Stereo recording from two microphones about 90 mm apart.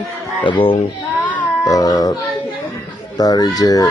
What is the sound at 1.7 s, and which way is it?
Speech, 45° left (ahead or behind).